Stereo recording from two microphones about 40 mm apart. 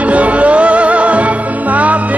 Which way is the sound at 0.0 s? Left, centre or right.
Right.